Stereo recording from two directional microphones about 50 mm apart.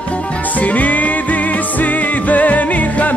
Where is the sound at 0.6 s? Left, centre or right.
Left.